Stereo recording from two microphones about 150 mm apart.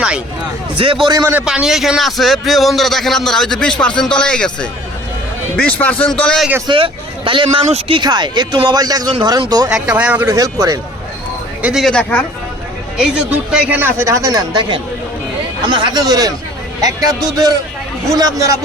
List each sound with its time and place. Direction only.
0.8 s speech: 35° right (ahead or behind)
1.3 s a man's voice: 10° right (ahead or behind)
6.7 s speech: 35° right (ahead or behind)
9.6 s speech: 5° right (ahead or behind)
10.2 s speech: 20° right (ahead or behind)
11.6 s a man's voice: centre (ahead or behind)
13.0 s speech: 5° right (ahead or behind); by 18.6 s 20° right (ahead or behind)